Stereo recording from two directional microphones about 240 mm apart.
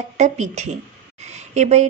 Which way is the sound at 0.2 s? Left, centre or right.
Right.